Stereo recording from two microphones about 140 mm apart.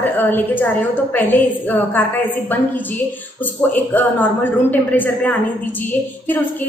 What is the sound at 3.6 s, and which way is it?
A woman's voice, 10° left (ahead or behind).